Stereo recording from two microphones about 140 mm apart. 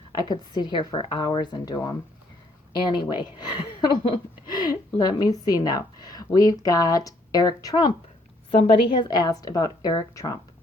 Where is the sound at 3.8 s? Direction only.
30° left (ahead or behind).